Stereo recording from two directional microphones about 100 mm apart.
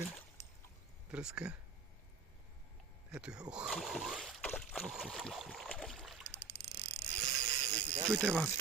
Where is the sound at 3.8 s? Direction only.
Centre (ahead or behind).